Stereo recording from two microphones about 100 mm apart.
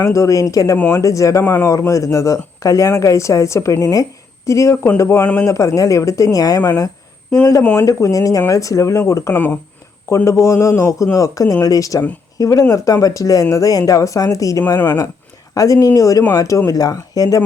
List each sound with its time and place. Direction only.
0.0 s speech: 30° left (ahead or behind)
5.2 s a man's voice: 15° left (ahead or behind)
5.5 s speech: 30° left (ahead or behind)
9.3 s a man's voice: 15° left (ahead or behind)
10.2 s speech: 30° left (ahead or behind)